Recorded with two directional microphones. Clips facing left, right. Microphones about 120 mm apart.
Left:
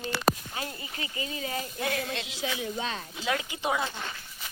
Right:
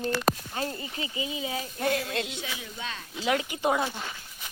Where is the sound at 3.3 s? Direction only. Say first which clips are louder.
Right 4 dB; 25° right (ahead or behind).